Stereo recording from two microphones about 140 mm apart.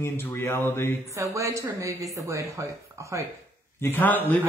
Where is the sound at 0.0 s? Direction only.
15° left (ahead or behind).